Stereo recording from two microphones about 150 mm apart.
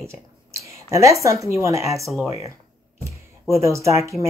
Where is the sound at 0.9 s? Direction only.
20° right (ahead or behind).